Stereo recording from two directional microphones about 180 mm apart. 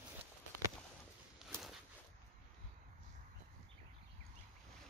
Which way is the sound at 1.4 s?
Centre (ahead or behind).